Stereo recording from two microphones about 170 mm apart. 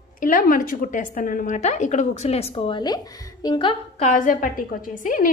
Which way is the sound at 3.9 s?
45° left (ahead or behind).